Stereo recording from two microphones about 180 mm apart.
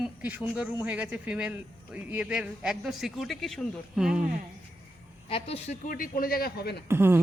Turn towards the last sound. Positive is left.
turn(degrees=-15)  # may be behind; listen again after turning